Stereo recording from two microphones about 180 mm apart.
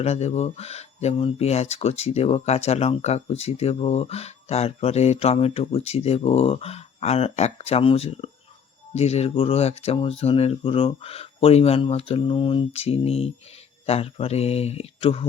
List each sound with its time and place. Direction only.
0.0 s speech: 35° left (ahead or behind)